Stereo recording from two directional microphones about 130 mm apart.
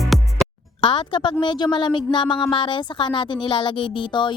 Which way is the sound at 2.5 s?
40° left (ahead or behind).